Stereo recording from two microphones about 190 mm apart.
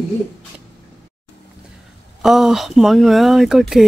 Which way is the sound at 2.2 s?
Centre (ahead or behind).